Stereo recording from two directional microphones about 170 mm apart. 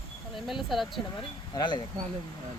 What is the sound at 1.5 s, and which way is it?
Speech, 25° left (ahead or behind).